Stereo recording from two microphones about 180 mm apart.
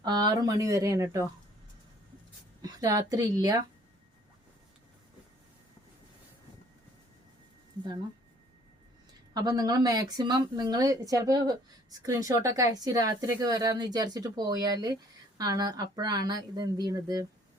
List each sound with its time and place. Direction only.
0.0 s speech: 20° right (ahead or behind)
2.6 s a woman's voice: 20° right (ahead or behind)
9.3 s speech: 20° right (ahead or behind)